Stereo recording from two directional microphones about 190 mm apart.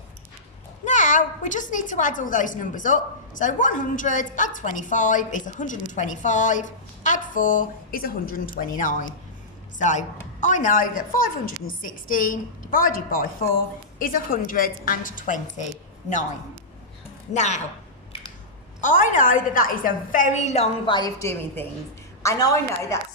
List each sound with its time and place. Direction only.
0.9 s a woman's voice: 40° left (ahead or behind)
17.3 s a woman's voice: 35° left (ahead or behind)
18.8 s a woman's voice: 40° left (ahead or behind); by 23.0 s 15° left (ahead or behind)